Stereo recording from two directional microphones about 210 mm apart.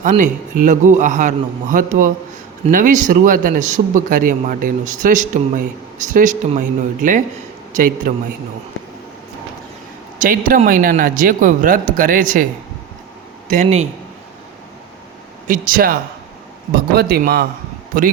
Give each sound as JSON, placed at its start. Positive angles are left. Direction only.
{"t": 0.0, "sound": "speech", "side_deg": -35}
{"t": 10.2, "sound": "speech", "side_deg": -40}
{"t": 13.5, "sound": "speech", "side_deg": -35}
{"t": 15.4, "sound": "speech", "side_deg": -40}